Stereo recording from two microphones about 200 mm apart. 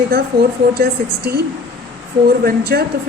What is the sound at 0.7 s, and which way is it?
Speech, 50° right (ahead or behind).